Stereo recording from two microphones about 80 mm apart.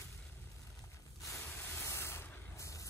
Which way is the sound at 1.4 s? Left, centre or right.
Left.